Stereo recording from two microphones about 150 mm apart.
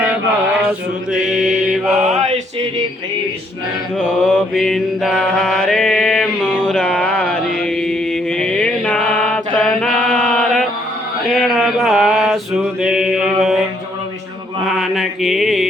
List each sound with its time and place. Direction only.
1.2 s mantra: centre (ahead or behind)
3.9 s mantra: 5° left (ahead or behind)
14.6 s mantra: centre (ahead or behind)